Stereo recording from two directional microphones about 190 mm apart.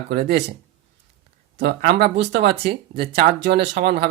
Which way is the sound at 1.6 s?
55° right (ahead or behind).